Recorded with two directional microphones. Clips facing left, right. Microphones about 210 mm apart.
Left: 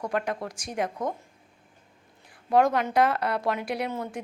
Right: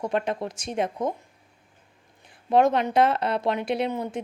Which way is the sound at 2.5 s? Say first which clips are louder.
Right 2 dB; 25° right (ahead or behind).